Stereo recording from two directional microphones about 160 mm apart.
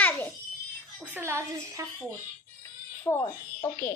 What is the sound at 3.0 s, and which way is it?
Speech, 10° left (ahead or behind).